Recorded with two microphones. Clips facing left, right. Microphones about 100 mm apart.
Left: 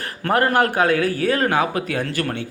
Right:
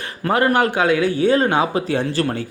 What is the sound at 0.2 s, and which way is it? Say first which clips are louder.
A man's voice: right 1 dB; 15° right (ahead or behind).